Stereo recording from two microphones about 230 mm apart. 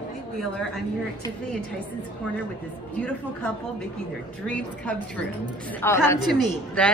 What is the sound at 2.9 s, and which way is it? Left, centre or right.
A man's voice, centre.